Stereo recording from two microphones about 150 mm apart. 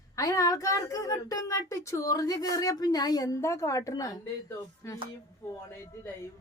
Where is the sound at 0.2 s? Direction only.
25° left (ahead or behind).